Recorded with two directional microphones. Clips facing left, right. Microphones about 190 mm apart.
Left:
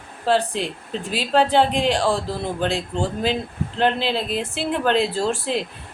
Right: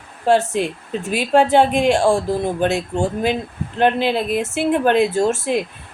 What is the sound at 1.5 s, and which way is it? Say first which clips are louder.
Speech: right 4 dB; 15° right (ahead or behind).